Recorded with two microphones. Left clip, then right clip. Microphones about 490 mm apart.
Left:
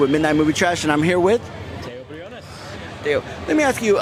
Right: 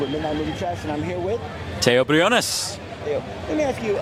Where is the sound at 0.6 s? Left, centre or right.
Left.